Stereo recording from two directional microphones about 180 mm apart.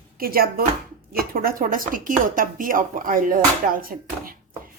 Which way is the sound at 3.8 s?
50° right (ahead or behind).